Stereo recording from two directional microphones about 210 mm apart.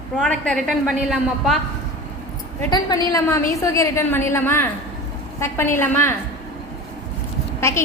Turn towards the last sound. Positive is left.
turn(degrees=10)  # may be behind; listen again after turning